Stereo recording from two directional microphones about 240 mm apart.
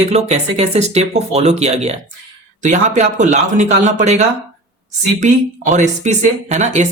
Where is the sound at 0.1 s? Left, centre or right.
Right.